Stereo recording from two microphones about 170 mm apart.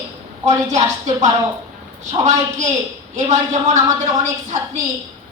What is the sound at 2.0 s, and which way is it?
A woman's voice, 45° right (ahead or behind).